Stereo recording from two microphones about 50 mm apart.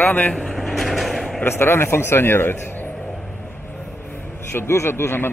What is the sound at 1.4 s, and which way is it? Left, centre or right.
A man's voice, left.